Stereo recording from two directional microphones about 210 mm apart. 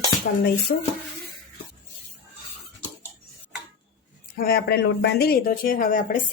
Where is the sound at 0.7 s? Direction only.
40° left (ahead or behind).